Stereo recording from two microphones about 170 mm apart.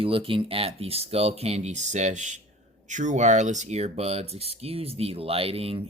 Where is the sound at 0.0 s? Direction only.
30° right (ahead or behind).